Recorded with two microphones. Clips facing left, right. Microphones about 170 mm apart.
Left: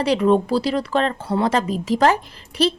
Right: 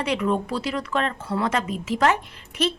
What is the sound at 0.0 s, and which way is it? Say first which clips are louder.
Speech: left 7 dB; 35° left (ahead or behind).